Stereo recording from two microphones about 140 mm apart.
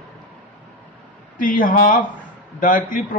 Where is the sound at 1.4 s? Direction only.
80° left.